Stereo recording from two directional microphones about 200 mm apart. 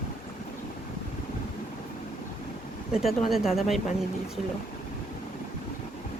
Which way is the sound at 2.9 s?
Centre (ahead or behind).